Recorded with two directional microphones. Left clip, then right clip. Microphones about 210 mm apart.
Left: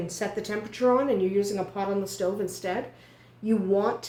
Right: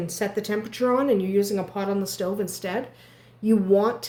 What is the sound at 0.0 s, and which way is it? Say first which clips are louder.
Speech: right 3 dB; 55° right (ahead or behind).